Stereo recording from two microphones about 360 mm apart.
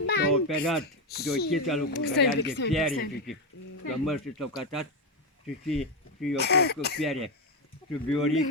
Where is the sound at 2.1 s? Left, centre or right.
Left.